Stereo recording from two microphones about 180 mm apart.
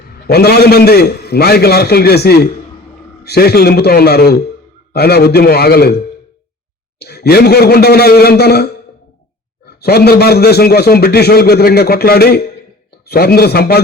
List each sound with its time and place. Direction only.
0.3 s a man's voice: 60° left (ahead or behind)
7.0 s a man's voice: 60° left (ahead or behind)
9.6 s a man's voice: 60° left (ahead or behind)